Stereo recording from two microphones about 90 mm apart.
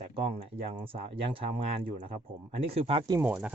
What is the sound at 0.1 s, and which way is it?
Speech, 90° right.